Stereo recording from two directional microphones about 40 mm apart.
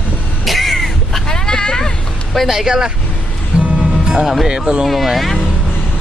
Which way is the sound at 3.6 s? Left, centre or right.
Right.